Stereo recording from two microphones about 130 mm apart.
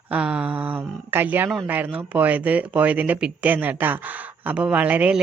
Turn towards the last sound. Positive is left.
turn(degrees=-10)  # may be behind; listen again after turning